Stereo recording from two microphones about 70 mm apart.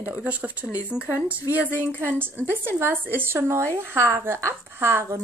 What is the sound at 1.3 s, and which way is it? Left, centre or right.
Speech, right.